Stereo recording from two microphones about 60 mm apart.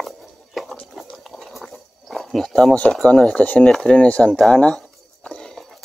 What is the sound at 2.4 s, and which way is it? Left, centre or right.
Speech, centre.